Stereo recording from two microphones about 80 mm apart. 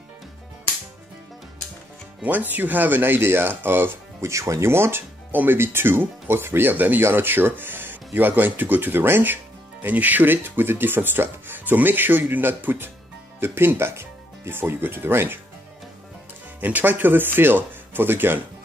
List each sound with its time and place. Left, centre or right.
2.2 s speech: right
16.6 s speech: right